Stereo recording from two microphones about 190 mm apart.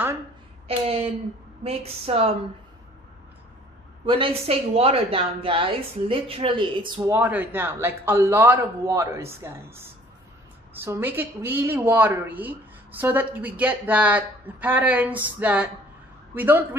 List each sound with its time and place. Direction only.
0.7 s speech: 30° right (ahead or behind)
4.0 s a woman's voice: 30° right (ahead or behind)
7.1 s a man's voice: 10° right (ahead or behind)